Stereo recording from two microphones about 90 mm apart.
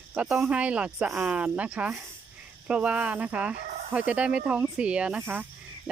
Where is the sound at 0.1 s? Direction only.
10° right (ahead or behind).